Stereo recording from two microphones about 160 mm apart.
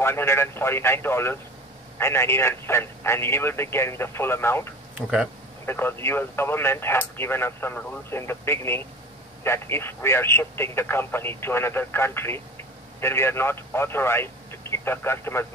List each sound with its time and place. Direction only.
0.0 s speech: 15° left (ahead or behind)
4.9 s speech: 5° right (ahead or behind)
5.7 s speech: 15° left (ahead or behind)